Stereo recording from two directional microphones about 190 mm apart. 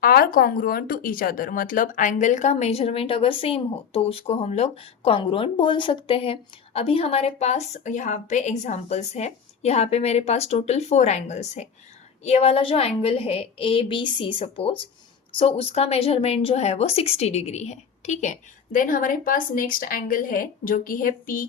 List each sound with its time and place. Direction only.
0.0 s speech: 50° left (ahead or behind)